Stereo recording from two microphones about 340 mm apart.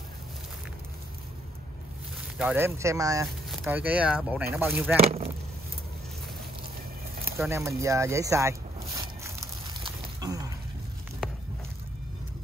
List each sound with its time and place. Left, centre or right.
2.3 s speech: centre
4.9 s speech: centre
7.2 s speech: centre
9.8 s a sound: centre